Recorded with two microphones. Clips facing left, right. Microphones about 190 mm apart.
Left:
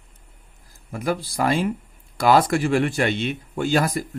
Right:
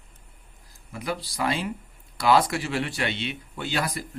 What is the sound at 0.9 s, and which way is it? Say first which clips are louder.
Speech: left 6 dB; 50° left (ahead or behind).